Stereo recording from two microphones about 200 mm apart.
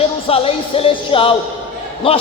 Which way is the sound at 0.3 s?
30° left (ahead or behind).